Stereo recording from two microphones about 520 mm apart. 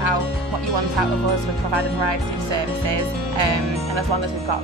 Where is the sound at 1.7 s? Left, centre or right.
Right.